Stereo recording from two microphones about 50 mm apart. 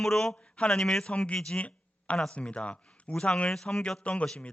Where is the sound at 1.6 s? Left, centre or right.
Left.